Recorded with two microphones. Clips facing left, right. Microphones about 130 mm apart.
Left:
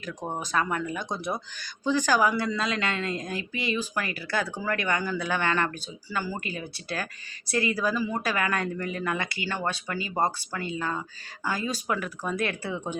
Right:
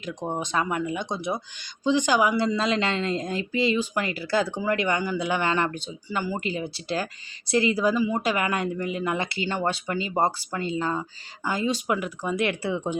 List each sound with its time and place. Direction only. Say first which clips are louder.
0.0 s speech: right 4 dB; 20° right (ahead or behind)